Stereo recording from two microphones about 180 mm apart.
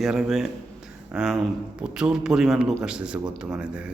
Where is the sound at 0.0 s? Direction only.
5° right (ahead or behind).